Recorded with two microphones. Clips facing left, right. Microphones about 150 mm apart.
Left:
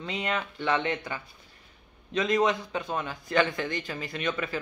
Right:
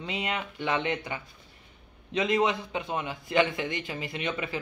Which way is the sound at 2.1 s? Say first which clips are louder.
Left 1 dB; 25° right (ahead or behind).